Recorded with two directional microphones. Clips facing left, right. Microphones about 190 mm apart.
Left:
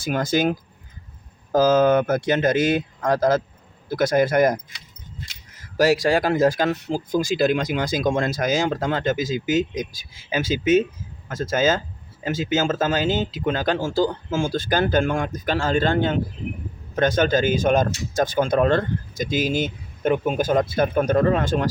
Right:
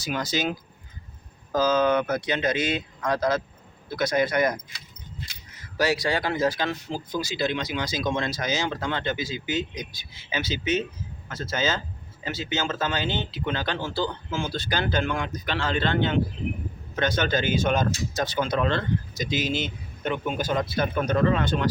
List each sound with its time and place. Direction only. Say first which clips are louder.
0.0 s speech: left 6 dB; 50° left (ahead or behind)
1.5 s speech: left 5 dB; 50° left (ahead or behind)
5.5 s speech: left 6 dB; 45° left (ahead or behind)